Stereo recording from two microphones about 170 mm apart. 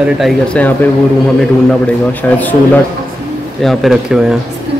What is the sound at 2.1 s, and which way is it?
A man's voice, 10° left (ahead or behind).